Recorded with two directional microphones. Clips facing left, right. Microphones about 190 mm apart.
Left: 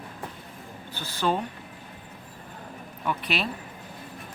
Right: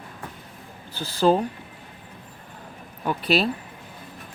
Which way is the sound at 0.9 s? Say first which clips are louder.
Right 7 dB; 35° right (ahead or behind).